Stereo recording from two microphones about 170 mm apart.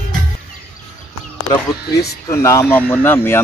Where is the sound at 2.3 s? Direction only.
15° left (ahead or behind).